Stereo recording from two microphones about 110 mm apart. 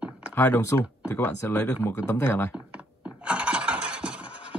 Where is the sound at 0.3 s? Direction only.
20° left (ahead or behind).